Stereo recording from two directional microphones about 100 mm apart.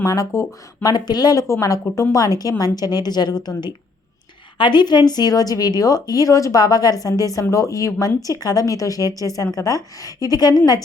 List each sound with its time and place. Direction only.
0.0 s a woman's voice: 35° left (ahead or behind)